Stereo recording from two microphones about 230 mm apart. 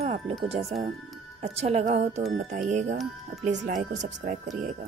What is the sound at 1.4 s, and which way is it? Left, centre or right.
Speech, right.